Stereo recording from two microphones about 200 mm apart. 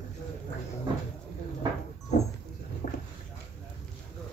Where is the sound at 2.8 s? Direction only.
45° left (ahead or behind).